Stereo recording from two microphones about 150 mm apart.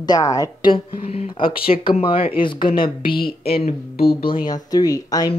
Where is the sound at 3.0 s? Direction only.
80° left.